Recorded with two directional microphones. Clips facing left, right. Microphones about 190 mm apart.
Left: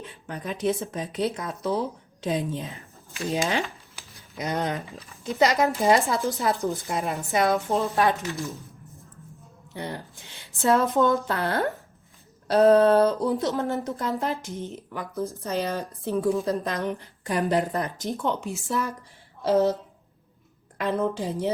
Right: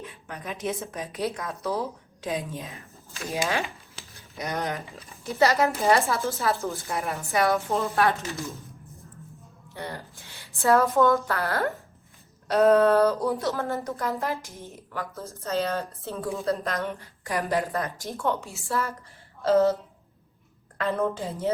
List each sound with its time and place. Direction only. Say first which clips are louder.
0.0 s a woman's voice: left 3 dB; 35° left (ahead or behind); by 7.9 s 20° left (ahead or behind)
9.7 s a woman's voice: left 2 dB; 20° left (ahead or behind)
12.5 s a woman's voice: left 2 dB; 30° left (ahead or behind); by 19.7 s 15° left (ahead or behind)
20.7 s speech: left 1 dB; 15° left (ahead or behind)